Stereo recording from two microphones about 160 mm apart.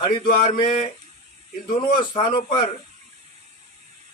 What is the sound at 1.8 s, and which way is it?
Speech, 30° left (ahead or behind).